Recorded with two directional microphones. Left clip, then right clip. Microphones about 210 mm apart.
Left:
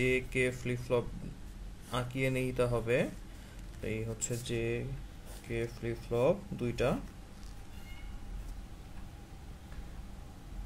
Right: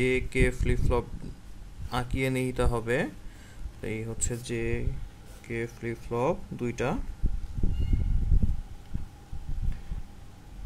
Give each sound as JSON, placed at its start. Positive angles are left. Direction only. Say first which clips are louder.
{"t": 0.0, "sound": "speech", "louder": "right 4 dB", "side_deg": -30}